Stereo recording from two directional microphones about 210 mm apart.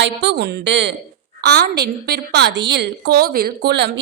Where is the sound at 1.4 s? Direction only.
50° right (ahead or behind).